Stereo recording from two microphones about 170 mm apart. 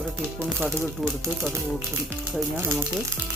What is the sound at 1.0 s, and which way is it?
Speech, 15° right (ahead or behind).